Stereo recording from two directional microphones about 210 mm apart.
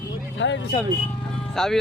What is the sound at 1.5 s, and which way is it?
Speech, 5° left (ahead or behind).